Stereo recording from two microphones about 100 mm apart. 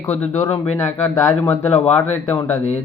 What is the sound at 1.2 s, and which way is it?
Speech, 25° left (ahead or behind).